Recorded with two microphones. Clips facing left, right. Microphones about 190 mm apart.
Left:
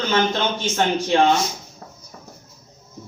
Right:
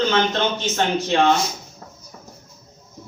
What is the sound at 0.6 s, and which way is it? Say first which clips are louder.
Speech: left 1 dB; 15° left (ahead or behind).